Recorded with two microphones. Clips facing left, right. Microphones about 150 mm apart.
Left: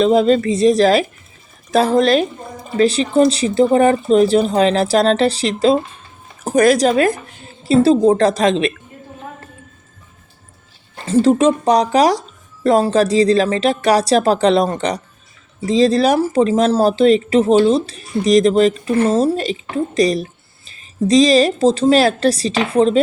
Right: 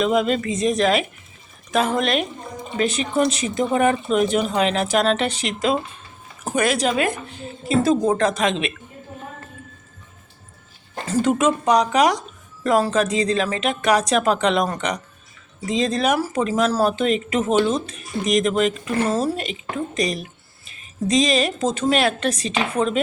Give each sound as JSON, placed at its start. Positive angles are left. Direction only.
{"t": 0.0, "sound": "speech", "side_deg": 35}
{"t": 11.1, "sound": "speech", "side_deg": 30}